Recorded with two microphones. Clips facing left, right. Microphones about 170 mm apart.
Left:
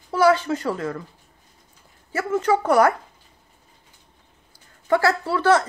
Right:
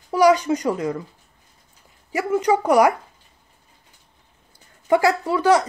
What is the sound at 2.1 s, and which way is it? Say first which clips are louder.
Speech: right 2 dB; 15° right (ahead or behind).